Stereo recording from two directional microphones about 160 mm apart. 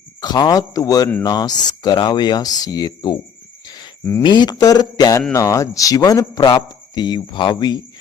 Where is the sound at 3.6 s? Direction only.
25° left (ahead or behind).